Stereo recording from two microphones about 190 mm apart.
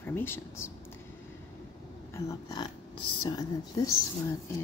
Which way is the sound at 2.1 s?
15° left (ahead or behind).